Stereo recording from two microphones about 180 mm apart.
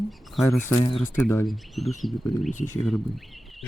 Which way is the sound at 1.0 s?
15° left (ahead or behind).